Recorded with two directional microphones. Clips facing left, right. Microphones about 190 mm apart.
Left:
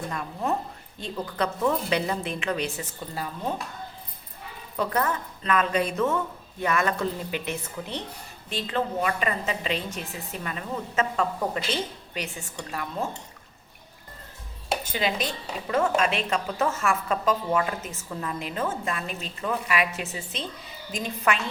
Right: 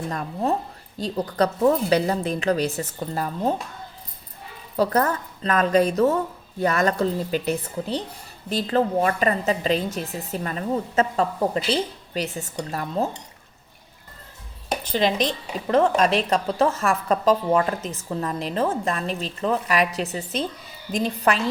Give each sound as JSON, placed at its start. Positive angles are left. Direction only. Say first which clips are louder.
{"t": 0.1, "sound": "a woman's voice", "louder": "right 5 dB", "side_deg": -40}
{"t": 4.8, "sound": "a woman's voice", "louder": "right 5 dB", "side_deg": -40}
{"t": 14.9, "sound": "a woman's voice", "louder": "right 8 dB", "side_deg": -35}